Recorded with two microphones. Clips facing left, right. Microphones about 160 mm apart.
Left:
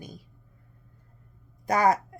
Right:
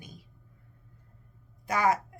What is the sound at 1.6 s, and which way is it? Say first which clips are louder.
Speech: left 4 dB; 35° left (ahead or behind).